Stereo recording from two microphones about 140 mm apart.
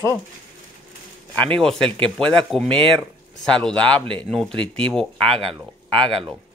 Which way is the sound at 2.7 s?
40° right (ahead or behind).